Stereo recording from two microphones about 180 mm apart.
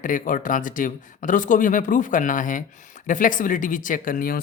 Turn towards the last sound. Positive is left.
turn(degrees=50)  # may be behind; listen again after turning